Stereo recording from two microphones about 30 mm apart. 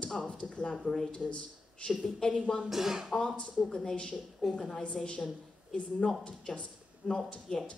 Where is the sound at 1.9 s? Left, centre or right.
Centre.